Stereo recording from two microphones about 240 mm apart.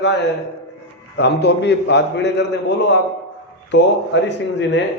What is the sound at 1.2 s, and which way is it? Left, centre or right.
A man's voice, left.